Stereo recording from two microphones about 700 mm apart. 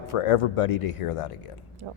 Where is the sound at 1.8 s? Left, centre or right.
Right.